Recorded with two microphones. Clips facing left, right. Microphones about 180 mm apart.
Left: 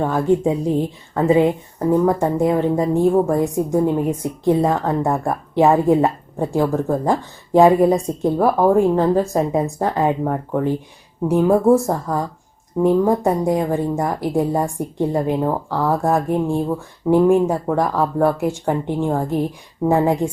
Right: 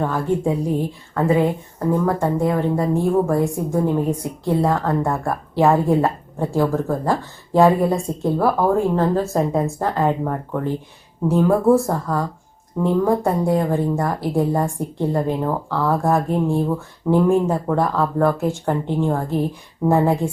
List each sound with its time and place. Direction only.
0.0 s a woman's voice: 20° left (ahead or behind)